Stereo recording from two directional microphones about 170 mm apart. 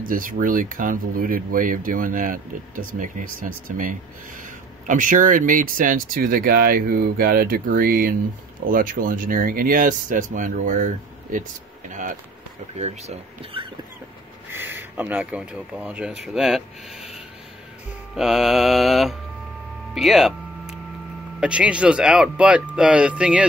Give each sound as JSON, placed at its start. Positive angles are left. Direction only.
{"t": 0.0, "sound": "speech", "side_deg": -55}
{"t": 11.9, "sound": "speech", "side_deg": -50}
{"t": 12.7, "sound": "speech", "side_deg": -40}
{"t": 14.5, "sound": "speech", "side_deg": -15}
{"t": 16.3, "sound": "music", "side_deg": -5}
{"t": 18.1, "sound": "music", "side_deg": 0}
{"t": 21.4, "sound": "speech", "side_deg": -5}